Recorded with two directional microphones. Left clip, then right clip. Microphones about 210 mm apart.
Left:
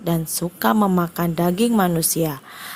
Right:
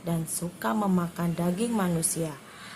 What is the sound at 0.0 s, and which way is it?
A woman's voice, 40° left (ahead or behind).